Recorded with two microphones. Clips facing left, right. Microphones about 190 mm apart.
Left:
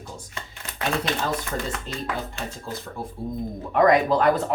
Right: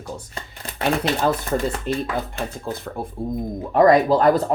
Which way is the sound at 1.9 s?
60° right (ahead or behind).